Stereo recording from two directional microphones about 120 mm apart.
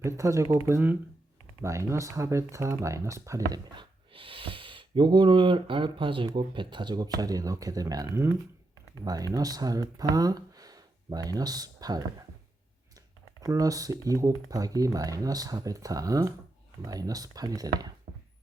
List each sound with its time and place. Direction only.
0.0 s speech: 25° right (ahead or behind)
3.8 s speech: 50° right (ahead or behind); by 12.0 s 35° right (ahead or behind)
13.4 s speech: 30° right (ahead or behind)